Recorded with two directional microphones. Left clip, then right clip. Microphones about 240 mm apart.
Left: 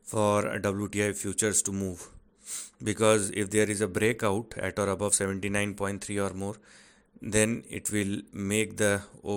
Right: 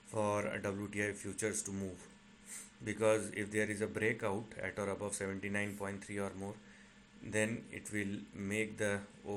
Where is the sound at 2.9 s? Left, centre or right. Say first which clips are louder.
Left 9 dB; left.